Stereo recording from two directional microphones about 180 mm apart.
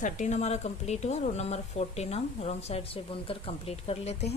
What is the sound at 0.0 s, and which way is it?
Speech, 40° left (ahead or behind).